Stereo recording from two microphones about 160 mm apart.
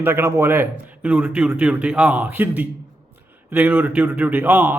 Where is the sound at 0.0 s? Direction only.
15° right (ahead or behind).